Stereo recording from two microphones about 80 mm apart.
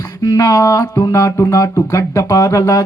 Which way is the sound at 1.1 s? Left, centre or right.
Left.